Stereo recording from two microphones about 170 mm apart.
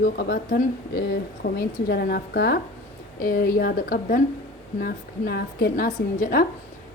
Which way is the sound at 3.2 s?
60° left (ahead or behind).